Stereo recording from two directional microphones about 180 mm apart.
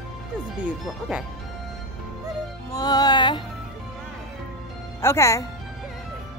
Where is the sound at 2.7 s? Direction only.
20° left (ahead or behind).